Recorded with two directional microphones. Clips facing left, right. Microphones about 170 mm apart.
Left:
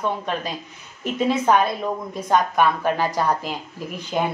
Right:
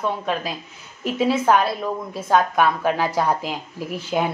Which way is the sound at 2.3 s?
5° right (ahead or behind).